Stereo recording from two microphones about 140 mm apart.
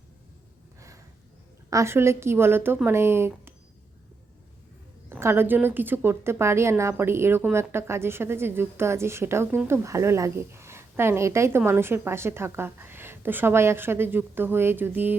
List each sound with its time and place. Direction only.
1.7 s a woman's voice: 20° right (ahead or behind)
5.0 s a woman's voice: 15° right (ahead or behind)